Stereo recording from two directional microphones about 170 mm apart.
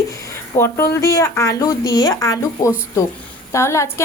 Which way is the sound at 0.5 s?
15° left (ahead or behind).